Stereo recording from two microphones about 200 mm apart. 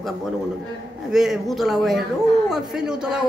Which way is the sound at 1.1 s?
Centre (ahead or behind).